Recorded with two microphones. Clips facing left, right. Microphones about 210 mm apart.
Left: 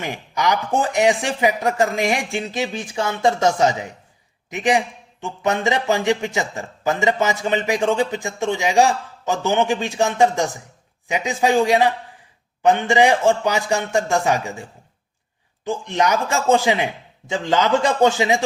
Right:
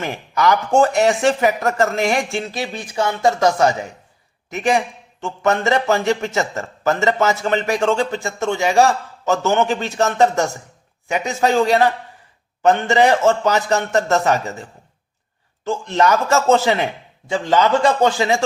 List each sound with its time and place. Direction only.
0.0 s a man's voice: 15° left (ahead or behind)